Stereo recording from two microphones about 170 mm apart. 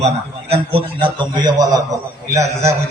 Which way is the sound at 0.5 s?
30° right (ahead or behind).